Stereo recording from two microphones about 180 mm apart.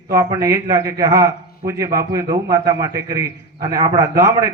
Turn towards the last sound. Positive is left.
turn(degrees=-15)  # may be behind; listen again after turning